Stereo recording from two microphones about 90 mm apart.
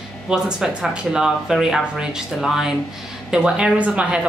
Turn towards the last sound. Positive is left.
turn(degrees=-10)  # may be behind; listen again after turning